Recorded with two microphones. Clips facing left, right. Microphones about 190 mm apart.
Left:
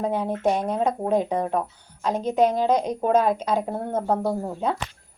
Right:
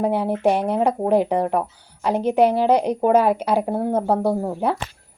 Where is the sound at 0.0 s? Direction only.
10° right (ahead or behind).